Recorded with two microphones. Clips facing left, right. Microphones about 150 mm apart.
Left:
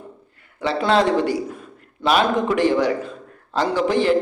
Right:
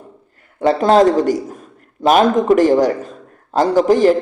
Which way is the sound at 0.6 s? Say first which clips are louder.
Right 7 dB; 45° right (ahead or behind).